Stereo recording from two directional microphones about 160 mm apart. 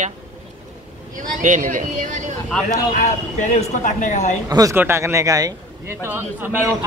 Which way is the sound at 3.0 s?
50° left (ahead or behind).